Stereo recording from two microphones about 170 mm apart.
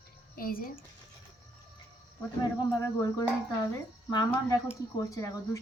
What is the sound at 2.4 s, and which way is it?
Speech, 20° left (ahead or behind).